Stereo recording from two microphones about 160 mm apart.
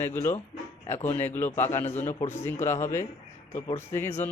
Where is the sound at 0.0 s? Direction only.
15° left (ahead or behind).